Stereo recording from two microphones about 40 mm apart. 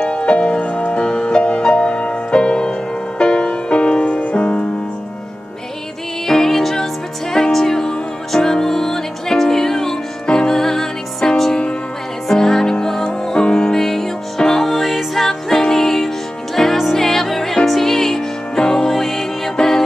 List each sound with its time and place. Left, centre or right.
0.0 s music: left
6.2 s music: centre
13.7 s music: centre
16.7 s music: centre